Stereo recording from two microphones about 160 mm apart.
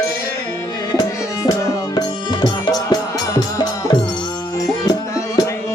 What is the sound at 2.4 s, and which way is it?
Music, 25° left (ahead or behind).